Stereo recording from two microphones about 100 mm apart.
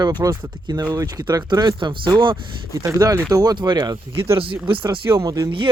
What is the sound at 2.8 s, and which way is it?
Speech, 35° right (ahead or behind).